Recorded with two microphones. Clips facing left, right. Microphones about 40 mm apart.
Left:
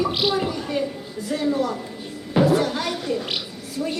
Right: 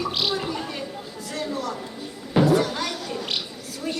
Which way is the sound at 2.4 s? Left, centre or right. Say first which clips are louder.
Left 1 dB; centre.